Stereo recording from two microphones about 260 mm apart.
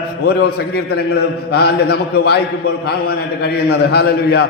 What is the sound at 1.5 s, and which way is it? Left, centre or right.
A man's voice, left.